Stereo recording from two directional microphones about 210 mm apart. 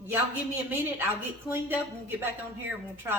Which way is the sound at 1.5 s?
20° left (ahead or behind).